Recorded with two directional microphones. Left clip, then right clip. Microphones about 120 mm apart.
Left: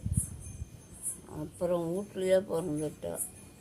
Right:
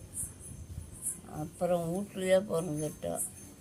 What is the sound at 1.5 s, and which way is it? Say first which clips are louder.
Speech: even; 25° left (ahead or behind).